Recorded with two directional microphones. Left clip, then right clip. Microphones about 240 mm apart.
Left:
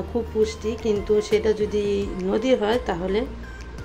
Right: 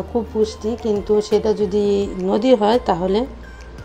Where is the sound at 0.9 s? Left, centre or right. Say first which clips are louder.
Right 4 dB; centre.